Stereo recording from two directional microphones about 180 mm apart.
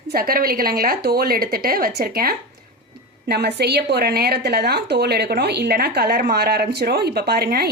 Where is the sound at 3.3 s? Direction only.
65° right (ahead or behind).